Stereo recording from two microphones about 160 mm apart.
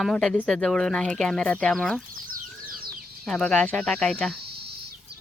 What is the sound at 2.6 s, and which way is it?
Bird, 65° right (ahead or behind).